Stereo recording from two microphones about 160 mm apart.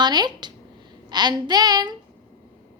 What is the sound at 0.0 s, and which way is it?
A woman's voice, 25° right (ahead or behind).